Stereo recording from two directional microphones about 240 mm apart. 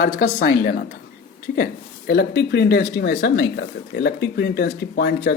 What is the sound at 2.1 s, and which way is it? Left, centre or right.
Speech, left.